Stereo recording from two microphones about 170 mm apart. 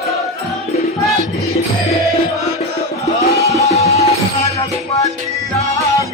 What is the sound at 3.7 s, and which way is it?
Music, 40° left (ahead or behind).